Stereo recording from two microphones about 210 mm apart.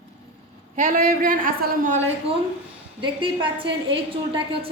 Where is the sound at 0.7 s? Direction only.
40° right (ahead or behind).